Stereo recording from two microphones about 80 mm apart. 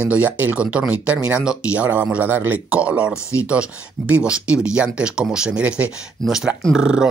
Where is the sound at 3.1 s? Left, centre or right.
Left.